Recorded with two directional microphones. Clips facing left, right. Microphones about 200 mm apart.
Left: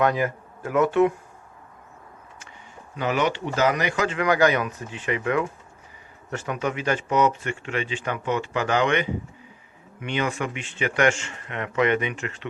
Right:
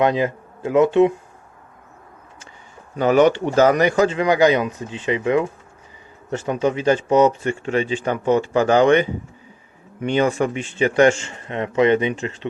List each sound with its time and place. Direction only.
0.0 s speech: 20° right (ahead or behind)
2.9 s speech: 45° right (ahead or behind)
4.1 s speech: 25° right (ahead or behind)